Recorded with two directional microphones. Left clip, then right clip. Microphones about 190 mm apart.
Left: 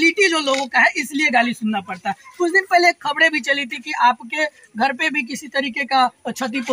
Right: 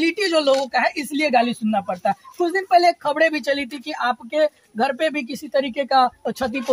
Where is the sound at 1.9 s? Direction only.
5° right (ahead or behind).